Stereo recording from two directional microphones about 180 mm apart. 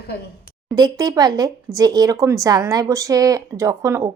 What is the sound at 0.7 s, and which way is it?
Speech, 20° right (ahead or behind).